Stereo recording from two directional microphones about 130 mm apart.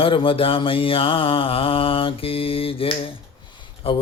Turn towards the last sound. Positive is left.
turn(degrees=45)  # may be behind; listen again after turning